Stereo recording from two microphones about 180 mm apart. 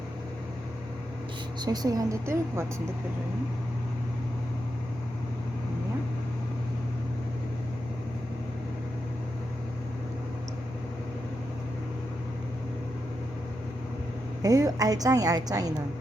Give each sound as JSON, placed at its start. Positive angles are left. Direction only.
{"t": 1.6, "sound": "a woman's voice", "side_deg": -20}
{"t": 14.4, "sound": "a woman's voice", "side_deg": -20}